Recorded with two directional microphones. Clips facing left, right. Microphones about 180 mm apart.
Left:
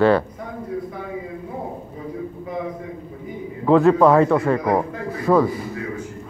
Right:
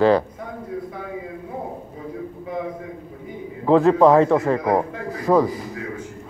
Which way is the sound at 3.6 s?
35° right (ahead or behind).